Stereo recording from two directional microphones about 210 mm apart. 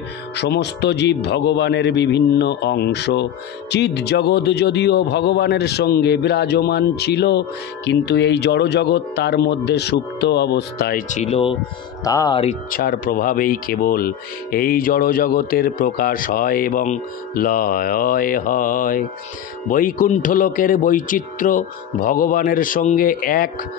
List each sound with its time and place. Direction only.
0.4 s a man's voice: 55° left (ahead or behind); by 11.5 s 30° left (ahead or behind)
12.0 s speech: 15° left (ahead or behind)
12.7 s a man's voice: 45° left (ahead or behind)